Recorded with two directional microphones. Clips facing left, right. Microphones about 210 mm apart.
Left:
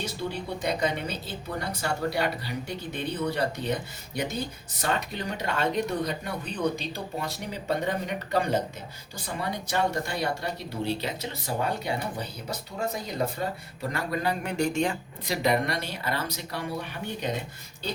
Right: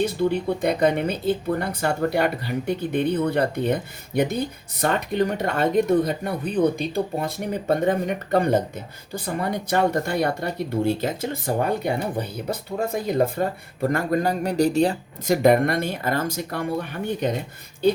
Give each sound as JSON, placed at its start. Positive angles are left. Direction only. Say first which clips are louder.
{"t": 0.0, "sound": "speech", "louder": "right 11 dB", "side_deg": -55}
{"t": 15.4, "sound": "speech", "louder": "right 8 dB", "side_deg": -50}